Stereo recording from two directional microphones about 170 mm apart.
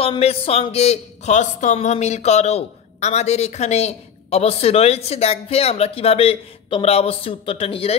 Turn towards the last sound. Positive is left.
turn(degrees=35)  # may be behind; listen again after turning